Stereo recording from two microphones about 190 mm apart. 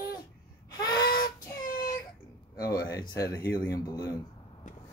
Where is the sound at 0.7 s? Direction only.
20° left (ahead or behind).